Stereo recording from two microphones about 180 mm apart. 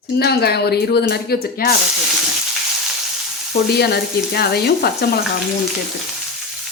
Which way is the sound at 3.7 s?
65° left (ahead or behind).